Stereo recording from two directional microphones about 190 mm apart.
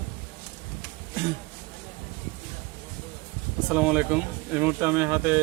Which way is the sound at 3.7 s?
5° right (ahead or behind).